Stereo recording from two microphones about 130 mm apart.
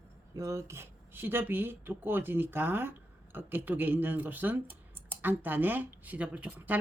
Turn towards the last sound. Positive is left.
turn(degrees=-10)  # may be behind; listen again after turning